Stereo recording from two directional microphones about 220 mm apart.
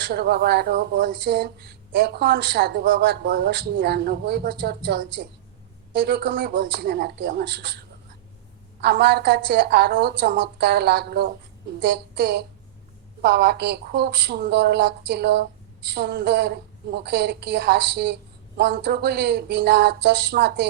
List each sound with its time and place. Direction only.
0.0 s speech: 45° right (ahead or behind)